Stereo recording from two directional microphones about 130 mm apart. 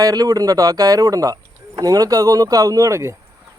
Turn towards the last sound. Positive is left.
turn(degrees=-20)  # may be behind; listen again after turning